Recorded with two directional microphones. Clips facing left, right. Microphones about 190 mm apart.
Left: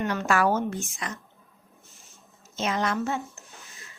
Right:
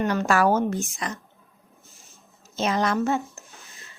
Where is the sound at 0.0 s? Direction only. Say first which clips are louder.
Right 3 dB; 40° right (ahead or behind).